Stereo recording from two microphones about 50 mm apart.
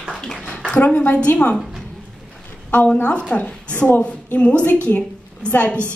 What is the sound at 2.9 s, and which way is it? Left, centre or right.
Speech, left.